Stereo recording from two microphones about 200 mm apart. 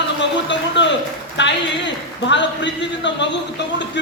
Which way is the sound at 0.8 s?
60° left (ahead or behind).